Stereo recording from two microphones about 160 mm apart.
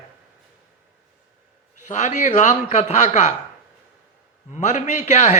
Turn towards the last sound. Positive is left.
turn(degrees=45)  # may be behind; listen again after turning